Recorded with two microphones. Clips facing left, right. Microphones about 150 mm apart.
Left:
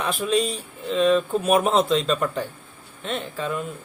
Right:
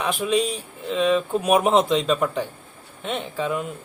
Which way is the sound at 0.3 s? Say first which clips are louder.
Left 1 dB; 10° right (ahead or behind).